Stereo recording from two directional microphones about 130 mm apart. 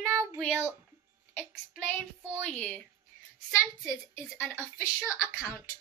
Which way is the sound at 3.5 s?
25° left (ahead or behind).